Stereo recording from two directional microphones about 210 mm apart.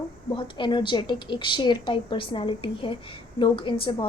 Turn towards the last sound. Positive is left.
turn(degrees=25)  # may be behind; listen again after turning